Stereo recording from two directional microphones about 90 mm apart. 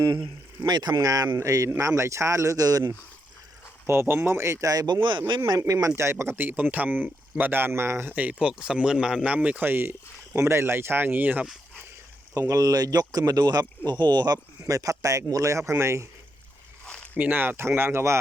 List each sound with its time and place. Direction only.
0.0 s speech: 55° right (ahead or behind)
4.0 s speech: 25° right (ahead or behind); by 4.9 s 40° right (ahead or behind)
5.0 s speech: 60° right (ahead or behind)
5.5 s speech: 40° right (ahead or behind); by 11.4 s 20° right (ahead or behind)
12.3 s speech: 40° right (ahead or behind); by 14.3 s 55° right (ahead or behind)
14.6 s speech: 40° right (ahead or behind)
16.8 s zipper: 15° left (ahead or behind)
17.2 s speech: 20° right (ahead or behind)